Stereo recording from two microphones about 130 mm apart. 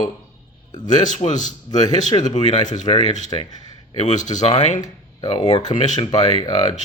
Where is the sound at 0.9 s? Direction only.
70° left (ahead or behind).